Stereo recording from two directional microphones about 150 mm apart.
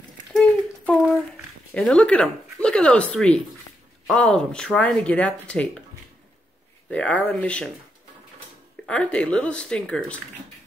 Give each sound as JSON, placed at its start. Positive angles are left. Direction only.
{"t": 0.3, "sound": "a sound", "side_deg": 5}
{"t": 1.7, "sound": "speech", "side_deg": 10}
{"t": 6.9, "sound": "speech", "side_deg": 10}
{"t": 8.8, "sound": "speech", "side_deg": 10}